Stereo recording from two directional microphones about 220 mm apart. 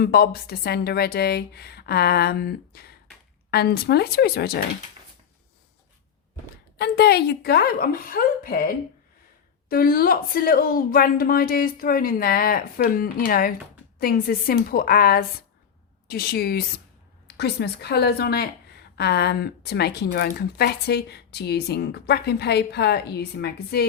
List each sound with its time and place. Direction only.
0.0 s a woman's voice: 45° left (ahead or behind)
6.7 s a woman's voice: 45° left (ahead or behind)